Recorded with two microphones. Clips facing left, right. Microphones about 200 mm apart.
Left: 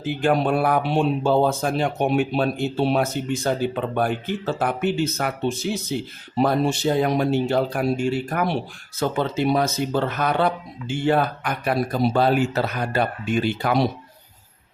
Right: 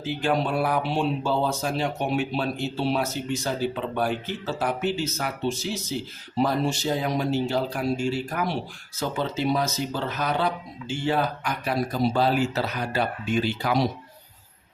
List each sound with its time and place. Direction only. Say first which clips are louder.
0.0 s speech: left 4 dB; 55° left (ahead or behind)